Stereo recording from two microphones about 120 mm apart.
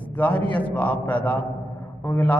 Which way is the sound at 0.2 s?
15° left (ahead or behind).